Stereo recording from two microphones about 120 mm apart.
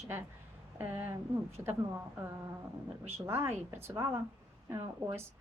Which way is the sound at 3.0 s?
20° right (ahead or behind).